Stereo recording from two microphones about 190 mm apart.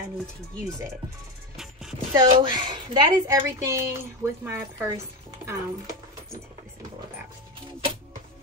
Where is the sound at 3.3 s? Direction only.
15° right (ahead or behind).